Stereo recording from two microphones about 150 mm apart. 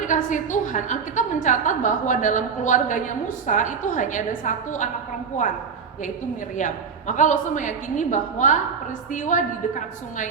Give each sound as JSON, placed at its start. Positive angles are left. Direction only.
{"t": 0.0, "sound": "a woman's voice", "side_deg": 60}
{"t": 6.6, "sound": "a woman's voice", "side_deg": 55}